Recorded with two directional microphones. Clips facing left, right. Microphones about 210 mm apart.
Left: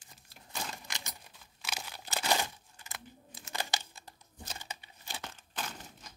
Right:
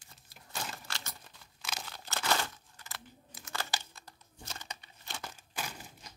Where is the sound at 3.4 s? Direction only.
20° left (ahead or behind).